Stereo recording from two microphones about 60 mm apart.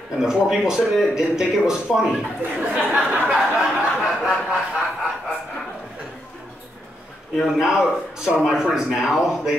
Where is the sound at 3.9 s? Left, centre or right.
Centre.